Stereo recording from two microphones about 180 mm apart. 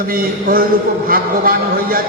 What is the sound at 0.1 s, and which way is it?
A man's voice, 55° right (ahead or behind).